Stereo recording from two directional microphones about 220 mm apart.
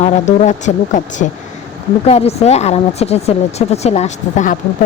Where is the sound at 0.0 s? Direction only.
30° left (ahead or behind).